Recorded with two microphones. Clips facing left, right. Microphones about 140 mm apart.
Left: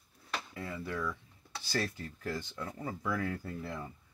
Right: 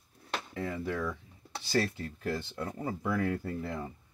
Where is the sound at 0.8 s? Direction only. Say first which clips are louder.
Right 3 dB; 30° right (ahead or behind).